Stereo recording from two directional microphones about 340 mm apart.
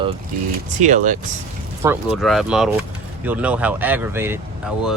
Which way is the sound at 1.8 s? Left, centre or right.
Centre.